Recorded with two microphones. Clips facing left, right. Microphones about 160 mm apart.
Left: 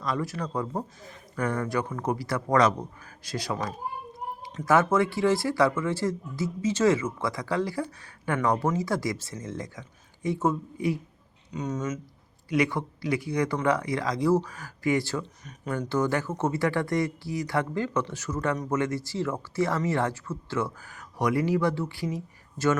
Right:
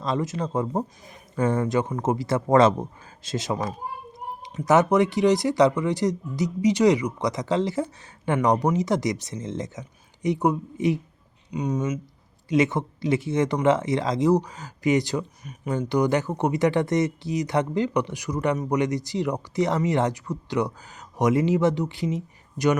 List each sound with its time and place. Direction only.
0.0 s speech: 20° right (ahead or behind)
12.5 s speech: 20° right (ahead or behind)